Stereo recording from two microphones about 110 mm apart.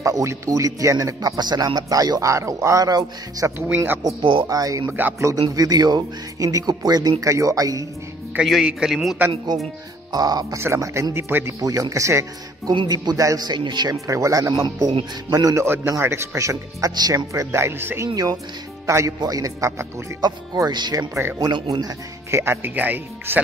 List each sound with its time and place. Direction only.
0.0 s a man's voice: 30° right (ahead or behind)
3.5 s speech: 15° right (ahead or behind)
4.2 s speech: 45° right (ahead or behind)
4.5 s a man's voice: 30° right (ahead or behind)
8.4 s a man's voice: 5° right (ahead or behind)
10.1 s a man's voice: 35° right (ahead or behind)
10.6 s speech: 25° right (ahead or behind)
11.6 s speech: 30° right (ahead or behind)
12.7 s a man's voice: 40° right (ahead or behind)
14.0 s a man's voice: 30° right (ahead or behind)
20.5 s a man's voice: 40° right (ahead or behind)
21.1 s speech: 20° right (ahead or behind)
21.4 s a man's voice: 35° right (ahead or behind)
22.3 s speech: 20° right (ahead or behind)